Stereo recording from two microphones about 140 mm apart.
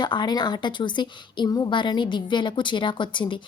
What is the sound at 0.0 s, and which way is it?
A woman's voice, 30° left (ahead or behind).